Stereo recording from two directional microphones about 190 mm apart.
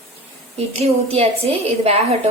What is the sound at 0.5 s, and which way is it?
A woman's voice, 35° right (ahead or behind).